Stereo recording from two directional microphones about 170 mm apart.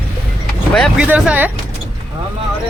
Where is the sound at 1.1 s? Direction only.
10° right (ahead or behind).